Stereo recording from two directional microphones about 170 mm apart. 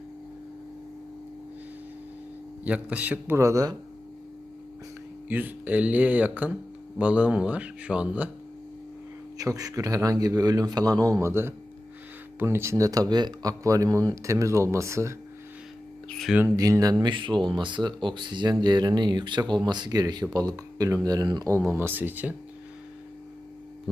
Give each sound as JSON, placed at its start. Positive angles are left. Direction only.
{"t": 2.6, "sound": "speech", "side_deg": -10}
{"t": 5.3, "sound": "speech", "side_deg": -10}
{"t": 9.4, "sound": "speech", "side_deg": -20}
{"t": 16.0, "sound": "a sound", "side_deg": 0}
{"t": 16.4, "sound": "speech", "side_deg": -20}